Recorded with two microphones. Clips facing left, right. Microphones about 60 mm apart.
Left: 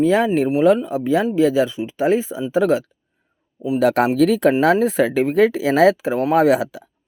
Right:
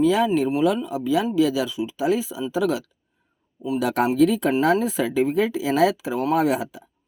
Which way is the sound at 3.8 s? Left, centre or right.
Left.